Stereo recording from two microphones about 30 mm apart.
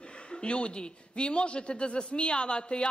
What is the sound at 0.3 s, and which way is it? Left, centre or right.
A man's voice, left.